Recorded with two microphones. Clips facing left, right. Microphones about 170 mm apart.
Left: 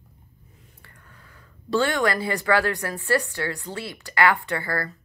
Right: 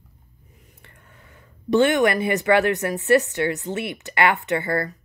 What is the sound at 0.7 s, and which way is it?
Speech, 20° right (ahead or behind).